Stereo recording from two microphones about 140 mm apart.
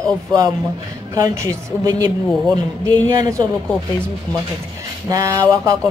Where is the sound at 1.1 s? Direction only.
25° right (ahead or behind).